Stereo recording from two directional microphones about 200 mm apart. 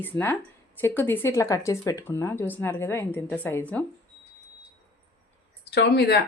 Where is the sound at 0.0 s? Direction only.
10° left (ahead or behind).